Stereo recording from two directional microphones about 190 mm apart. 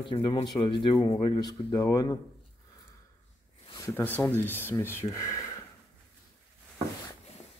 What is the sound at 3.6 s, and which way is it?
Speech, 20° left (ahead or behind).